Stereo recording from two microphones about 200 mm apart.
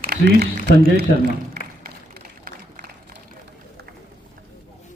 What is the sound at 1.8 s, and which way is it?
Run, 50° right (ahead or behind).